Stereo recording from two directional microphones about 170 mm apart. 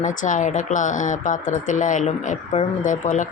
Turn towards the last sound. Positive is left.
turn(degrees=50)  # may be behind; listen again after turning